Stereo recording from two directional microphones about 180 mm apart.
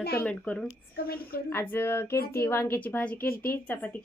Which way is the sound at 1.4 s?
10° left (ahead or behind).